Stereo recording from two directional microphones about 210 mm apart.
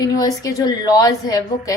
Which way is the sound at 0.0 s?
15° left (ahead or behind).